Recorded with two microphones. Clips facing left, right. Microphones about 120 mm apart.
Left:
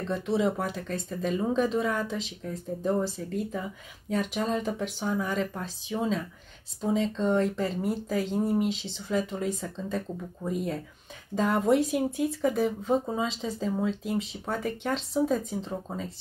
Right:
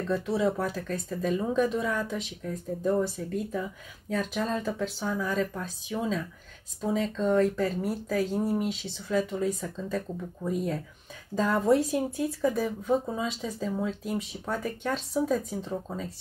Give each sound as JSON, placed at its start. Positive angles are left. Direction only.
{"t": 0.1, "sound": "speech", "side_deg": 25}
{"t": 4.1, "sound": "speech", "side_deg": 20}